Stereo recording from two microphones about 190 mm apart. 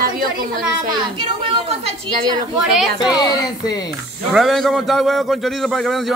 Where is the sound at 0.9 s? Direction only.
30° right (ahead or behind).